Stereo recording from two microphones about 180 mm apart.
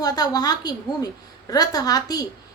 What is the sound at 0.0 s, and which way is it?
A woman's voice, 20° left (ahead or behind).